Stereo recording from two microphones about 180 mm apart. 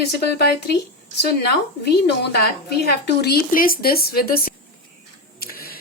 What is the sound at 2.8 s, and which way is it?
Speech, 60° left (ahead or behind).